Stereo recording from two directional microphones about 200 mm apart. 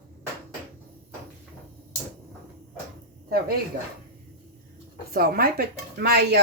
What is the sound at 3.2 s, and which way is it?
Speech, 50° right (ahead or behind).